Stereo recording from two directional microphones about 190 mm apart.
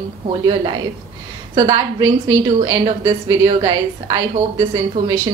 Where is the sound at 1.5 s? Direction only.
20° right (ahead or behind).